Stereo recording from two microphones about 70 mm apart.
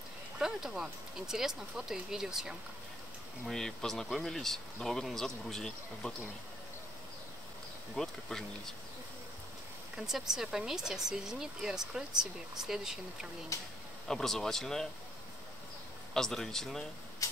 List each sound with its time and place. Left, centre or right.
0.4 s speech: centre
3.4 s speech: centre
7.9 s speech: centre
9.9 s speech: centre
13.5 s speech: left
14.0 s speech: centre
16.1 s speech: centre